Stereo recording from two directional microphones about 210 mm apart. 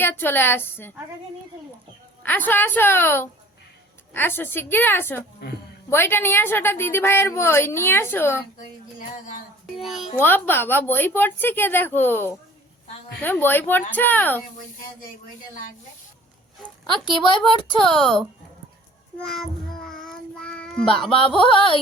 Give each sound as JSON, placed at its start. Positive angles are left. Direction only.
{"t": 0.0, "sound": "a woman's voice", "side_deg": 10}
{"t": 2.2, "sound": "a woman's voice", "side_deg": 10}
{"t": 9.7, "sound": "speech", "side_deg": 0}
{"t": 10.2, "sound": "a woman's voice", "side_deg": 10}
{"t": 17.9, "sound": "speech", "side_deg": 0}
{"t": 19.2, "sound": "child singing", "side_deg": 0}
{"t": 20.8, "sound": "music", "side_deg": 25}